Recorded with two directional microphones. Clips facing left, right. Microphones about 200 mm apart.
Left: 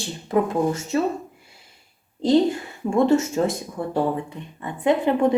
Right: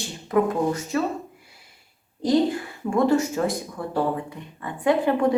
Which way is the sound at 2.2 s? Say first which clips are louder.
Left 2 dB; 25° left (ahead or behind).